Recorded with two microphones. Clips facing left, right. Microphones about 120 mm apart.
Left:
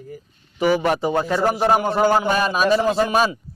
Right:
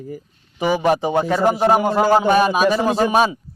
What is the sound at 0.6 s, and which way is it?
A man's voice, 20° right (ahead or behind).